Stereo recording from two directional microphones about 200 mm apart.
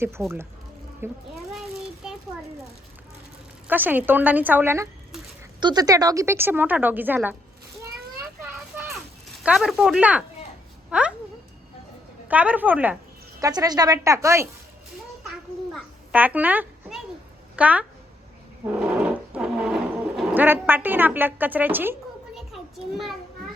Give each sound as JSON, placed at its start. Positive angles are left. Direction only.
{"t": 0.0, "sound": "a woman's voice", "side_deg": -10}
{"t": 1.5, "sound": "a sound", "side_deg": 0}
{"t": 3.7, "sound": "a woman's voice", "side_deg": -10}
{"t": 8.7, "sound": "children playing", "side_deg": -10}
{"t": 9.4, "sound": "speech", "side_deg": -5}
{"t": 12.3, "sound": "a woman's voice", "side_deg": -5}
{"t": 13.4, "sound": "a woman's voice", "side_deg": -20}
{"t": 15.7, "sound": "a sound", "side_deg": -10}
{"t": 17.6, "sound": "a woman's voice", "side_deg": -5}
{"t": 18.6, "sound": "a sound", "side_deg": -5}
{"t": 22.4, "sound": "children playing", "side_deg": 0}